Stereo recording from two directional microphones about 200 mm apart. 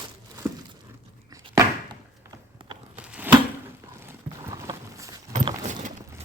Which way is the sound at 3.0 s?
5° right (ahead or behind).